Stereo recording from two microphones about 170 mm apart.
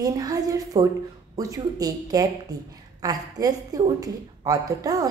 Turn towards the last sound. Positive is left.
turn(degrees=-20)  # may be behind; listen again after turning